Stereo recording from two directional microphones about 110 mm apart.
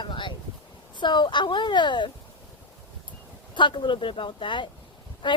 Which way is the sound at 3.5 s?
45° left (ahead or behind).